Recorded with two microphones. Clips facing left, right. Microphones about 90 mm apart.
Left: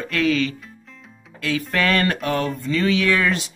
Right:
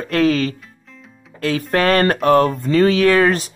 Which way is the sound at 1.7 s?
40° right (ahead or behind).